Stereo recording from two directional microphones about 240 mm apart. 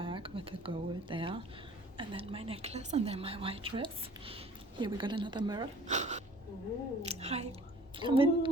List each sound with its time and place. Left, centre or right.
0.0 s a woman's voice: right
5.9 s a woman's voice: right